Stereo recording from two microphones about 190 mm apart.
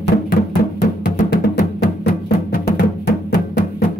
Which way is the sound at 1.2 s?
60° left (ahead or behind).